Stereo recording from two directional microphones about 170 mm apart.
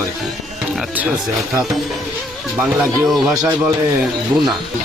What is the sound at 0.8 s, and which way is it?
Speech, 5° right (ahead or behind).